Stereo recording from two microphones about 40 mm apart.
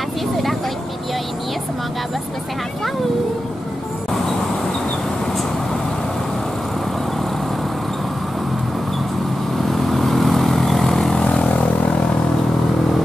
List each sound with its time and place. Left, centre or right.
9.7 s vehicle: centre
11.1 s vehicle: centre